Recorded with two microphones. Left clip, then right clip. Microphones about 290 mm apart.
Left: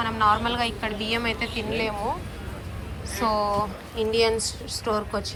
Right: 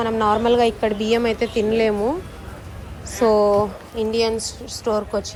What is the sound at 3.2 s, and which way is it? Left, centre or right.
Speech, right.